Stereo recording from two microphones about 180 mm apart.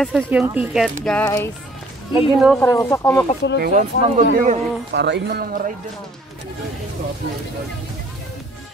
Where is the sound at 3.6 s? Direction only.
45° right (ahead or behind).